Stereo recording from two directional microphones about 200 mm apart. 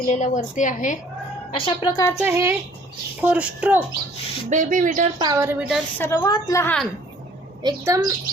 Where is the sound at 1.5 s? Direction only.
25° left (ahead or behind).